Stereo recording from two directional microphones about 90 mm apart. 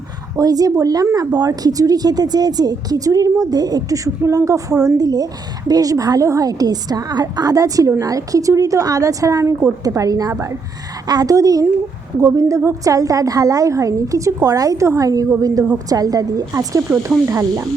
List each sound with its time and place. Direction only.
0.3 s a woman's voice: 45° right (ahead or behind)
11.0 s a woman's voice: 45° right (ahead or behind)